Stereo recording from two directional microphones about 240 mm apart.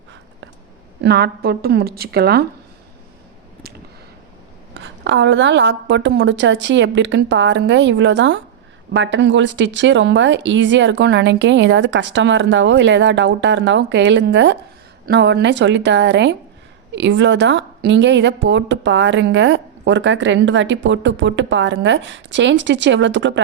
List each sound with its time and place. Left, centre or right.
1.0 s a woman's voice: right
4.7 s a woman's voice: right